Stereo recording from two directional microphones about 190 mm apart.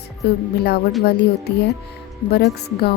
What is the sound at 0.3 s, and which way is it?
A woman's voice, 60° left (ahead or behind).